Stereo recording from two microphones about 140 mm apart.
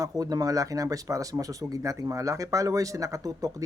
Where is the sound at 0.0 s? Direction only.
25° right (ahead or behind).